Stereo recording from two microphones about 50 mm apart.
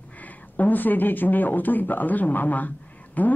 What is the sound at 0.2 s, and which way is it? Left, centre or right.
A woman's voice, left.